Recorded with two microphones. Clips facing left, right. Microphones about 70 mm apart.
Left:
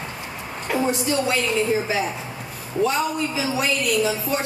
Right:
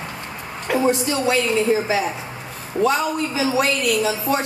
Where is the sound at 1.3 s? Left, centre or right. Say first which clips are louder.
Right 7 dB; right.